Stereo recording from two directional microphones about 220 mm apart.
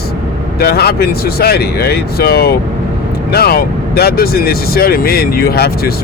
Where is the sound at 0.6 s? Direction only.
45° left (ahead or behind).